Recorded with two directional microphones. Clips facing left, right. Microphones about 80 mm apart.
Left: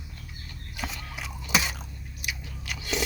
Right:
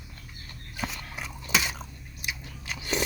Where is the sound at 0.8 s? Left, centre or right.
Right.